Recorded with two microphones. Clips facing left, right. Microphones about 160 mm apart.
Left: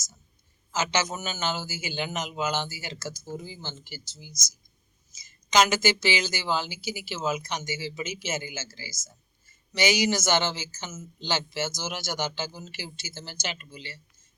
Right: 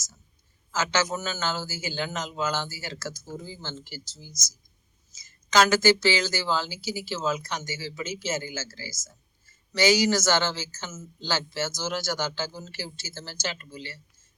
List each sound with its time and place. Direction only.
0.7 s a man's voice: 15° left (ahead or behind)